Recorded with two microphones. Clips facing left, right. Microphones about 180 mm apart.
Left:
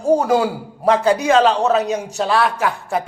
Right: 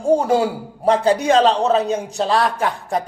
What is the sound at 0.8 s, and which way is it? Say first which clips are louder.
A man's voice: even; 30° right (ahead or behind).